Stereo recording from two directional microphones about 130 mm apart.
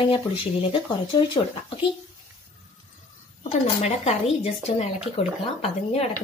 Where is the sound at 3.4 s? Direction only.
55° left (ahead or behind).